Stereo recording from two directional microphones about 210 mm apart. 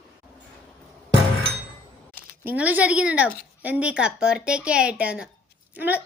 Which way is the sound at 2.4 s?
10° right (ahead or behind).